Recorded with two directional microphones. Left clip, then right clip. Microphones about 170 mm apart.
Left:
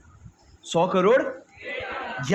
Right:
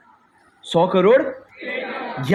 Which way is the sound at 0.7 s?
55° right (ahead or behind).